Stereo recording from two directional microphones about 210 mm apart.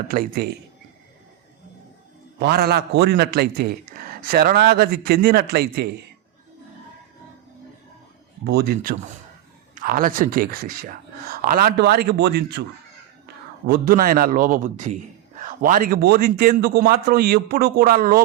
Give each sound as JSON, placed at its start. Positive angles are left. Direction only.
{"t": 0.1, "sound": "a man's voice", "side_deg": -45}
{"t": 2.4, "sound": "a man's voice", "side_deg": -50}
{"t": 8.4, "sound": "a man's voice", "side_deg": -50}